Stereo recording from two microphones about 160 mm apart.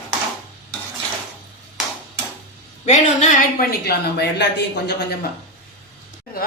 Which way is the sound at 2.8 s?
45° left (ahead or behind).